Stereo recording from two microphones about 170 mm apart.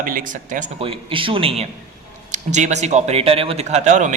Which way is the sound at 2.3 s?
45° right (ahead or behind).